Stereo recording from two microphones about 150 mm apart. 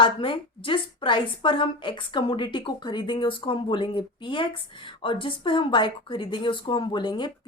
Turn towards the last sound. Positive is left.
turn(degrees=30)  # may be behind; listen again after turning